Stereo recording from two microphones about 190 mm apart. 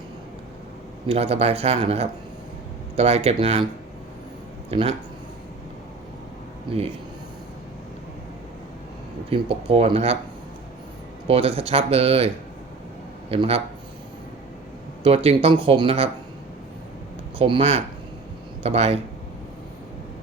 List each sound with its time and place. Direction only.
1.0 s speech: 30° right (ahead or behind)
4.7 s speech: 30° right (ahead or behind)
6.7 s speech: 25° right (ahead or behind)
9.3 s speech: 30° right (ahead or behind)
11.3 s speech: 30° right (ahead or behind)
13.3 s speech: 30° right (ahead or behind)
15.0 s speech: 30° right (ahead or behind)
17.3 s speech: 30° right (ahead or behind)